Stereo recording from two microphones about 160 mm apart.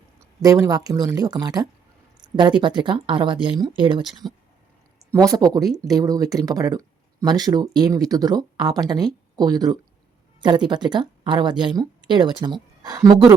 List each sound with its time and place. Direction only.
0.2 s speech: 20° right (ahead or behind)
4.0 s speech: centre (ahead or behind)
5.3 s speech: 25° right (ahead or behind)